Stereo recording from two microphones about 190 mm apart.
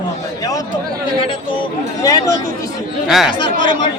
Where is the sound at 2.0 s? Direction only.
20° left (ahead or behind).